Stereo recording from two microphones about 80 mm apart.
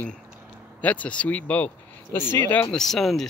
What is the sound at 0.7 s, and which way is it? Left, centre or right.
Speech, centre.